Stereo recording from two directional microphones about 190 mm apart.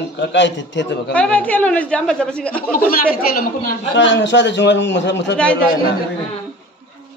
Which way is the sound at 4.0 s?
70° left (ahead or behind).